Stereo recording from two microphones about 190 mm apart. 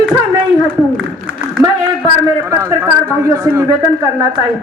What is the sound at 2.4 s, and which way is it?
A man's voice, 15° right (ahead or behind).